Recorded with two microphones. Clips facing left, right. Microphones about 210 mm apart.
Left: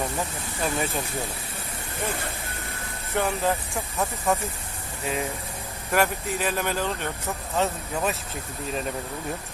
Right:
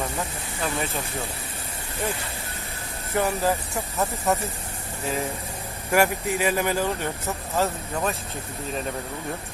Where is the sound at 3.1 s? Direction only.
Centre (ahead or behind).